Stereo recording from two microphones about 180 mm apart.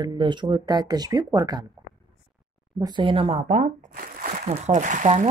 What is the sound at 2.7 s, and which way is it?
Speech, 25° right (ahead or behind).